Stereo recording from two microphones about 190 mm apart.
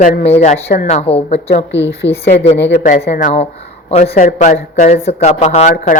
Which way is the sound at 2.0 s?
70° left (ahead or behind).